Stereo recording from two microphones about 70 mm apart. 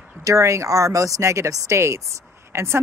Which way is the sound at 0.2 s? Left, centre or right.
Right.